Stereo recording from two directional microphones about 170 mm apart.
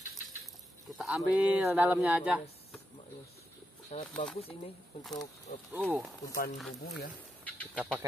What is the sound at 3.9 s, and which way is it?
Speech, 40° left (ahead or behind).